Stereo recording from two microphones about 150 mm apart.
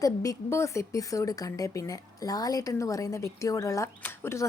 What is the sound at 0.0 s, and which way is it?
A woman's voice, 20° left (ahead or behind).